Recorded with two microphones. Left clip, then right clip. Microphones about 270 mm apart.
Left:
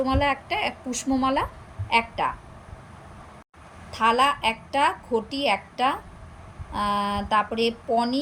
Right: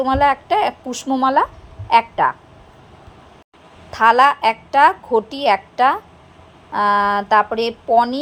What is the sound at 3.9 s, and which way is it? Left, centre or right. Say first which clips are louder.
A woman's voice: right 8 dB; centre.